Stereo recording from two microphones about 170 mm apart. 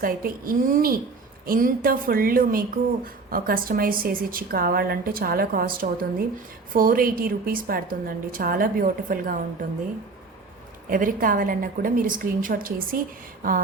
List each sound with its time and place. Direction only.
0.0 s a woman's voice: 55° right (ahead or behind)
10.8 s a woman's voice: 55° right (ahead or behind)